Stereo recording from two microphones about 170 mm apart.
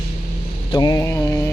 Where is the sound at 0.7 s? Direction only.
25° left (ahead or behind).